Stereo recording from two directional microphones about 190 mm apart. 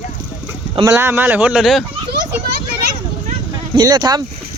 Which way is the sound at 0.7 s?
15° right (ahead or behind).